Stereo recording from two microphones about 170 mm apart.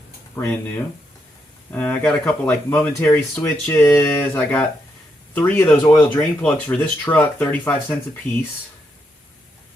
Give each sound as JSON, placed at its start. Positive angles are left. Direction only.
{"t": 0.4, "sound": "speech", "side_deg": 10}
{"t": 1.7, "sound": "speech", "side_deg": 10}
{"t": 5.8, "sound": "speech", "side_deg": 20}
{"t": 6.4, "sound": "speech", "side_deg": 10}